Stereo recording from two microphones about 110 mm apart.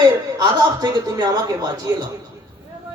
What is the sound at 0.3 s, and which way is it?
Speech, 35° right (ahead or behind).